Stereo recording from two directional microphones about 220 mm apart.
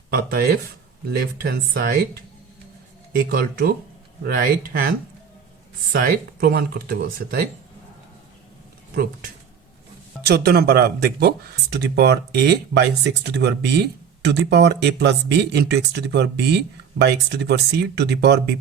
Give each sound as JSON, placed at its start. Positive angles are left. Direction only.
{"t": 0.1, "sound": "speech", "side_deg": -45}
{"t": 3.2, "sound": "speech", "side_deg": -40}
{"t": 5.9, "sound": "speech", "side_deg": -40}
{"t": 10.2, "sound": "speech", "side_deg": -45}